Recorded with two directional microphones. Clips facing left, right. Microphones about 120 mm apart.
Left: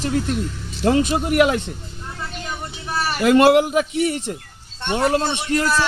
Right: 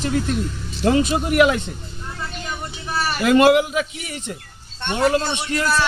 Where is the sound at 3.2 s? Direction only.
45° left (ahead or behind).